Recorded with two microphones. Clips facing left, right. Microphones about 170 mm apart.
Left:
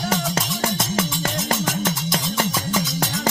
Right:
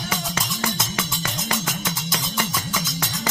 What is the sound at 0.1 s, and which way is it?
Music, 40° left (ahead or behind).